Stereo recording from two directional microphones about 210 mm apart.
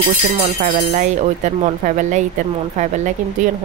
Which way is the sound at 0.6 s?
35° right (ahead or behind).